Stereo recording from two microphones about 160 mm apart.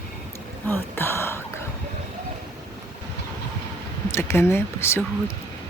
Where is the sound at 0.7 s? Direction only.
15° left (ahead or behind).